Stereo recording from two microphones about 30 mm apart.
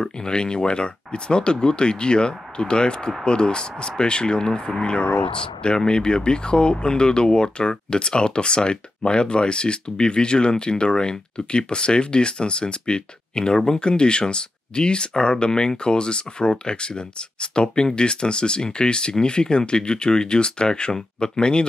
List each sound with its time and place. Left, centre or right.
0.0 s speech: left